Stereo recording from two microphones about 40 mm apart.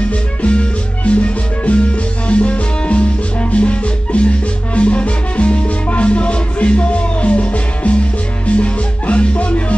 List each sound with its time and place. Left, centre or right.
0.4 s music: left
4.7 s salsa music: left
8.5 s music: left